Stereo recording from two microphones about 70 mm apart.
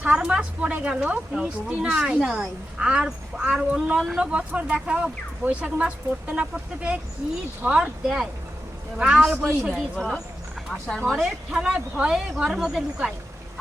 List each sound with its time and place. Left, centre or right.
0.0 s a woman's voice: centre
4.2 s speech: centre
11.1 s speech: centre
11.5 s speech: centre